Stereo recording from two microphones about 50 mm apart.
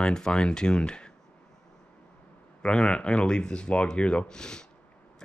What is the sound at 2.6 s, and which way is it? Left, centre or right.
Speech, left.